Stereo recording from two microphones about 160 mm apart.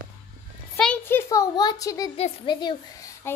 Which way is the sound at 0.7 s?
5° left (ahead or behind).